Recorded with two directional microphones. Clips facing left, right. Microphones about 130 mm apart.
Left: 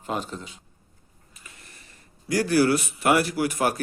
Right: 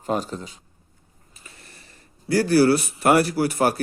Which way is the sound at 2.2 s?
30° right (ahead or behind).